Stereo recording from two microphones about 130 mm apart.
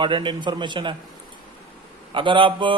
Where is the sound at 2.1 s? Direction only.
40° right (ahead or behind).